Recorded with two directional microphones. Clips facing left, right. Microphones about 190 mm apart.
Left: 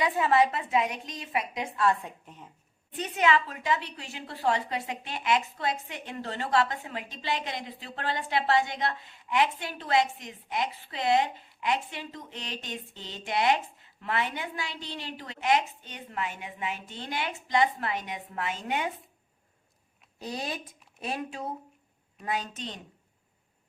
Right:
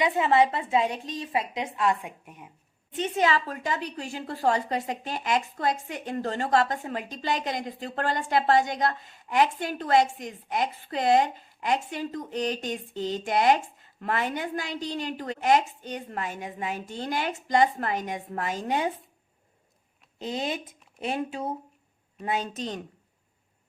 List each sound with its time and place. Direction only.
0.0 s a woman's voice: 25° right (ahead or behind)
2.9 s a woman's voice: 30° right (ahead or behind)
20.1 s a woman's voice: 20° right (ahead or behind)